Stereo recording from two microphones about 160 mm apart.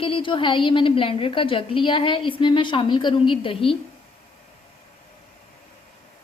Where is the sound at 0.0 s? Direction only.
35° left (ahead or behind).